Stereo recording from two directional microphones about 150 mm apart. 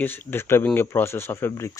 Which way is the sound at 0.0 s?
15° left (ahead or behind).